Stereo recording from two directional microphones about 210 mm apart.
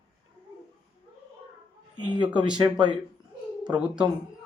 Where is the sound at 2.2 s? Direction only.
5° right (ahead or behind).